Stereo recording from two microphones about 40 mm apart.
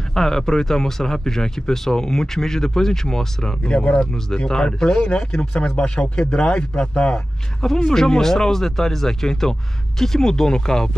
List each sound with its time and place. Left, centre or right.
0.1 s speech: centre
3.6 s speech: left
7.6 s speech: centre